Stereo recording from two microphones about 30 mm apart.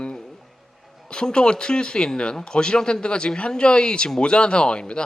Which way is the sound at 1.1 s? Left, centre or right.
Left.